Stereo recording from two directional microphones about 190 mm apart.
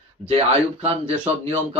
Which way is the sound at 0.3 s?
30° right (ahead or behind).